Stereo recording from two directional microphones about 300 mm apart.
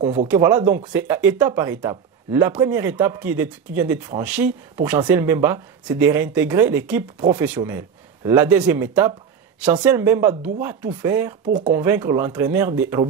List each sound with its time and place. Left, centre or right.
0.0 s speech: centre
0.3 s speech: centre
11.4 s speech: right
11.7 s speech: centre